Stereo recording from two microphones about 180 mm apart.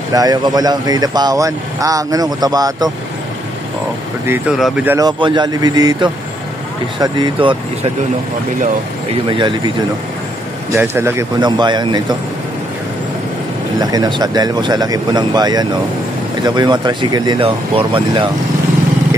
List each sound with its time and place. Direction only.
0.1 s speech: 20° right (ahead or behind)
4.3 s speech: centre (ahead or behind)
4.8 s speech: 20° right (ahead or behind)
9.3 s speech: 25° right (ahead or behind)
10.7 s speech: 15° right (ahead or behind)
13.7 s speech: 25° right (ahead or behind)